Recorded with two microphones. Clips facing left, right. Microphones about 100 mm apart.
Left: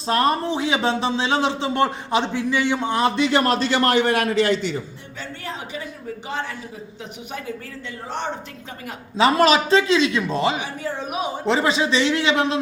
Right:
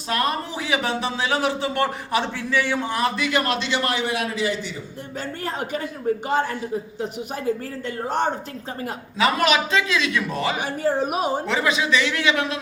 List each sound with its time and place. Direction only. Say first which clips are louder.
0.1 s a man's voice: left 5 dB; 30° left (ahead or behind); by 4.8 s 65° left (ahead or behind)
5.5 s speech: right 4 dB; 50° right (ahead or behind)
9.1 s a man's voice: left 4 dB; 30° left (ahead or behind)
10.6 s speech: right 6 dB; 45° right (ahead or behind)
11.4 s a man's voice: left 3 dB; 30° left (ahead or behind)